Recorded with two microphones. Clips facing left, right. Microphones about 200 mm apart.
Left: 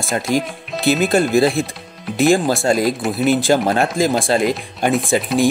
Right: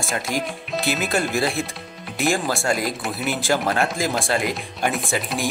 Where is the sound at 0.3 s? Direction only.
Centre (ahead or behind).